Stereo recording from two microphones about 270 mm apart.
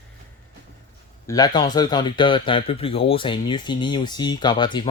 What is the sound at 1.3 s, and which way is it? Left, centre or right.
Speech, centre.